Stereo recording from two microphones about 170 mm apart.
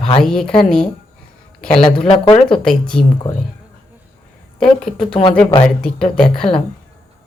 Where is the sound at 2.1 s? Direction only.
30° left (ahead or behind).